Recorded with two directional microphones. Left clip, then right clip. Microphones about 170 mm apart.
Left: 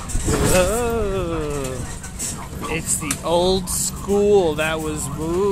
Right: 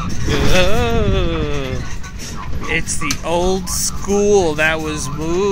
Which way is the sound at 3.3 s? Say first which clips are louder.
Even; 10° left (ahead or behind).